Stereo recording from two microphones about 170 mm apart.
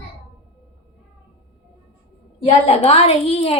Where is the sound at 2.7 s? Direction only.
35° left (ahead or behind).